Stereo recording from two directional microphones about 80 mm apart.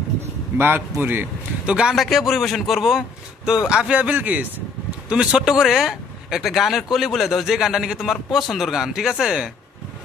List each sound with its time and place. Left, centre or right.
0.6 s a man's voice: right
2.0 s speech: centre; by 4.6 s right
5.1 s speech: centre